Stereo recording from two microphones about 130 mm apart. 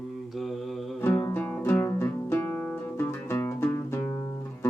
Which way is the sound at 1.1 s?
20° left (ahead or behind).